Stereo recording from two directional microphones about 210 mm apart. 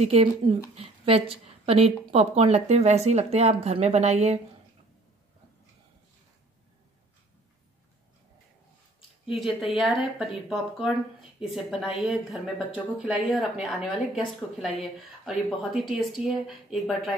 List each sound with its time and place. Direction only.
0.0 s a woman's voice: 30° right (ahead or behind)
9.3 s speech: centre (ahead or behind)